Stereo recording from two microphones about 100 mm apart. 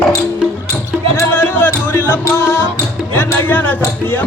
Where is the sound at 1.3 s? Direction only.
20° left (ahead or behind).